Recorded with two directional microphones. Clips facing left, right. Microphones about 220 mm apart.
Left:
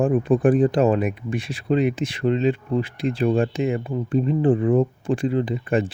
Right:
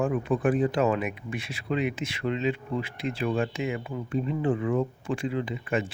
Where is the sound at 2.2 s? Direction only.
35° left (ahead or behind).